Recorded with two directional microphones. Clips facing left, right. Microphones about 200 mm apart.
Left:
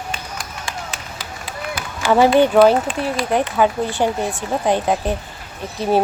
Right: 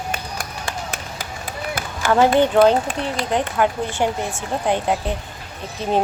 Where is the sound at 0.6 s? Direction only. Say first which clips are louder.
Right 1 dB; 50° right (ahead or behind).